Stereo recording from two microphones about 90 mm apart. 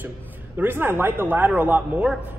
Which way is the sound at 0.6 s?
25° right (ahead or behind).